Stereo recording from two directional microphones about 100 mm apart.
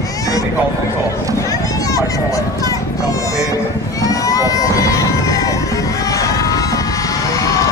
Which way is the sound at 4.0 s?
35° left (ahead or behind).